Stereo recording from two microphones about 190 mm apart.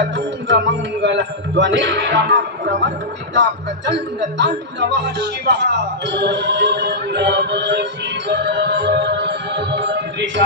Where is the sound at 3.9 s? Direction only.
70° right (ahead or behind).